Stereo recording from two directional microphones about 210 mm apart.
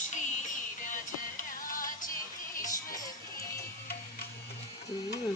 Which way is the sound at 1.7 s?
40° left (ahead or behind).